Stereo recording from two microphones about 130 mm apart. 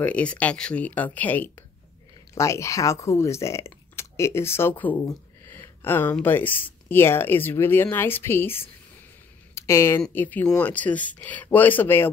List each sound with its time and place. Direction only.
0.0 s speech: 10° left (ahead or behind)
5.0 s a sound: 20° left (ahead or behind)
6.2 s speech: 15° left (ahead or behind)